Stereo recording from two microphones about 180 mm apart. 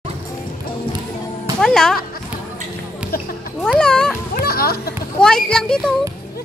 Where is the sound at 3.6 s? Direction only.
5° left (ahead or behind).